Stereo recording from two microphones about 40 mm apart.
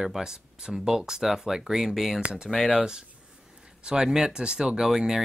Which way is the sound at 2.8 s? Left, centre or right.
Centre.